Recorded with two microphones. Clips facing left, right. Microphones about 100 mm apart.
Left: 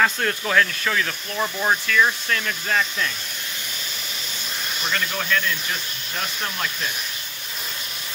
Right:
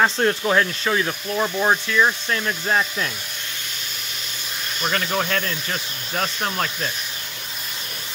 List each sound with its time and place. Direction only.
0.0 s speech: 25° right (ahead or behind)
1.3 s speech: 15° right (ahead or behind)
4.8 s speech: 40° right (ahead or behind)